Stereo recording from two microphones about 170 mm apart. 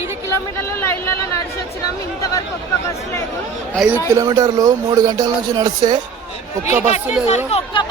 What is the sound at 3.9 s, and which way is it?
Speech, 15° right (ahead or behind).